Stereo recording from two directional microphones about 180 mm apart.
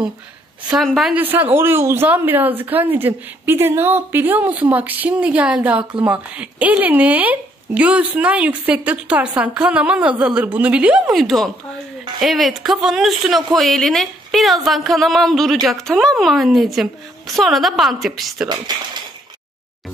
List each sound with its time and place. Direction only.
0.7 s speech: centre (ahead or behind)
18.7 s speech: 25° right (ahead or behind)